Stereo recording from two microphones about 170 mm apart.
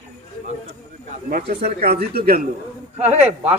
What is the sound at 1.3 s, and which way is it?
A man's voice, 65° right (ahead or behind).